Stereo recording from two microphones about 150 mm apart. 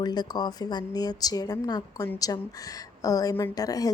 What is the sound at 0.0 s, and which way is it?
A woman's voice, 25° left (ahead or behind).